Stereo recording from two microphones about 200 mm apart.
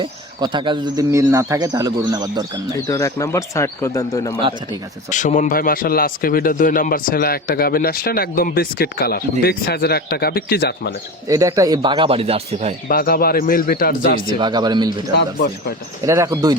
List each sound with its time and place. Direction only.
0.0 s speech: 20° right (ahead or behind)
2.8 s speech: 15° left (ahead or behind)
5.1 s speech: 40° left (ahead or behind); by 10.9 s 55° left (ahead or behind)
11.3 s speech: 15° right (ahead or behind); by 12.7 s 30° right (ahead or behind)
12.9 s speech: 45° left (ahead or behind)
14.3 s speech: 20° right (ahead or behind)
15.1 s speech: 50° left (ahead or behind)
16.0 s speech: 15° right (ahead or behind)